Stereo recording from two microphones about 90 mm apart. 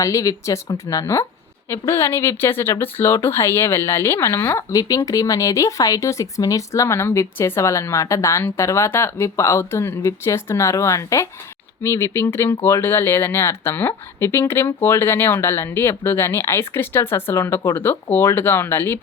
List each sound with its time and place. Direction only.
0.0 s speech: 35° left (ahead or behind)
4.8 s speech: 40° left (ahead or behind); by 18.9 s 25° left (ahead or behind)